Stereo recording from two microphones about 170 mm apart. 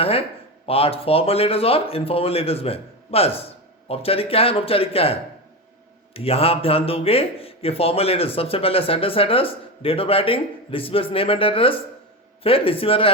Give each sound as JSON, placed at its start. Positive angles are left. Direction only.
{"t": 0.0, "sound": "speech", "side_deg": 35}
{"t": 6.1, "sound": "speech", "side_deg": 35}